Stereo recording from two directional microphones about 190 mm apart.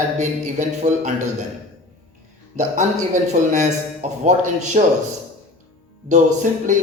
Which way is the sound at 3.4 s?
45° right (ahead or behind).